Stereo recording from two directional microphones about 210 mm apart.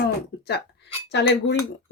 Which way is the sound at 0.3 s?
45° left (ahead or behind).